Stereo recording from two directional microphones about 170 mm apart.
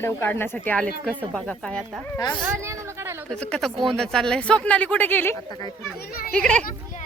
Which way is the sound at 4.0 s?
5° left (ahead or behind).